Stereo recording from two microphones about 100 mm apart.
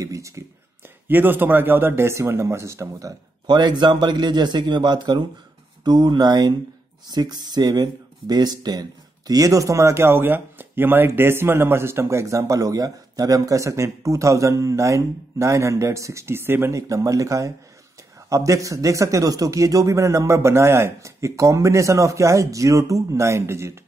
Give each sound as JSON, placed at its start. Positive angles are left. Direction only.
{"t": 0.0, "sound": "speech", "side_deg": -35}
{"t": 1.0, "sound": "speech", "side_deg": -20}